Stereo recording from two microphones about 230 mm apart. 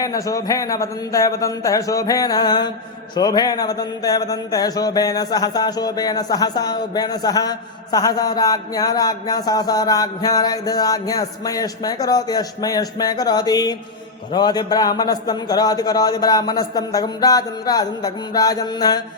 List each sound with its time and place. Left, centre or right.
0.0 s speech: centre